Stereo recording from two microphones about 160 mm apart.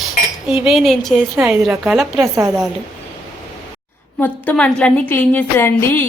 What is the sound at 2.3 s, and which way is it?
Speech, 20° right (ahead or behind).